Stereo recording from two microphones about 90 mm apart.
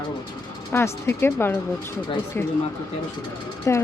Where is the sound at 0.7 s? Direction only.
25° left (ahead or behind).